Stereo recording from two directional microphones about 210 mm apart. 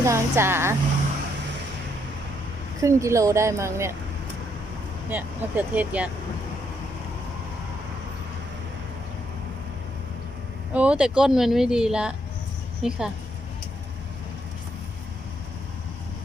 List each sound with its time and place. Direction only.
0.0 s a woman's voice: 10° right (ahead or behind)
2.8 s a woman's voice: 15° right (ahead or behind)
5.0 s a woman's voice: 10° right (ahead or behind)
10.8 s speech: 5° right (ahead or behind)